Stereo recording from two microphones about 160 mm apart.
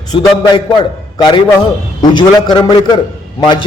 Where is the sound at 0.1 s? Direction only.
30° left (ahead or behind).